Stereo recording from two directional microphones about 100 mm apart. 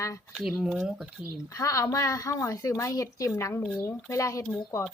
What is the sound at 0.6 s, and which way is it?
Speech, 10° right (ahead or behind).